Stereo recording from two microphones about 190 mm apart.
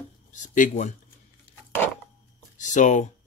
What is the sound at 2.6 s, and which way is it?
Speech, 40° left (ahead or behind).